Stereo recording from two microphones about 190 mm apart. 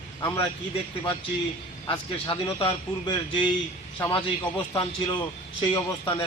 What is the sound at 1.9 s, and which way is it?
A man's voice, 25° left (ahead or behind).